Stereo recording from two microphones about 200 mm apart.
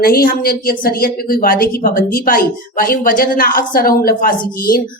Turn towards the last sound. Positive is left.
turn(degrees=45)  # may be behind; listen again after turning